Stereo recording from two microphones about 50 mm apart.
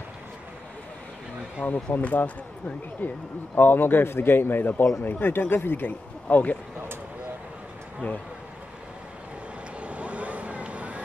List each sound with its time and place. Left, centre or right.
1.6 s speech: left
9.8 s vehicle: right